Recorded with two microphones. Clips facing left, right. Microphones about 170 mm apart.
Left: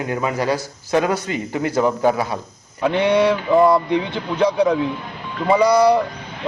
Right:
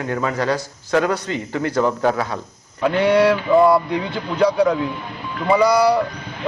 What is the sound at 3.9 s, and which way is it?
Speech, 20° left (ahead or behind).